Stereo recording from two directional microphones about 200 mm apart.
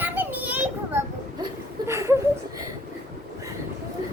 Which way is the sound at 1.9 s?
15° right (ahead or behind).